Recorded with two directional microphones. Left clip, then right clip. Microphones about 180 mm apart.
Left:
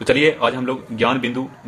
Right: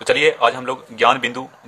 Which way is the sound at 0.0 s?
25° right (ahead or behind).